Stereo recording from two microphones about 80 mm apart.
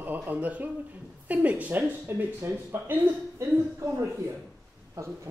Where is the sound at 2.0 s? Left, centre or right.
Right.